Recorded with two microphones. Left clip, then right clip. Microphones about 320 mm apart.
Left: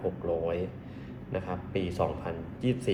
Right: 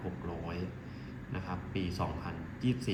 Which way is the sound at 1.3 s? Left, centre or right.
Centre.